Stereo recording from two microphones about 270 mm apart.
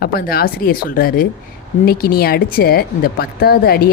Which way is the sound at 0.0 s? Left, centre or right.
Left.